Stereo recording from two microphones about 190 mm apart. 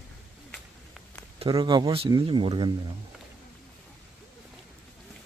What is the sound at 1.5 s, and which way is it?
Speech, 20° right (ahead or behind).